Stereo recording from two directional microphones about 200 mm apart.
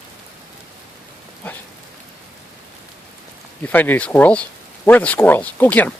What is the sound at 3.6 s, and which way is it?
Speech, 10° left (ahead or behind).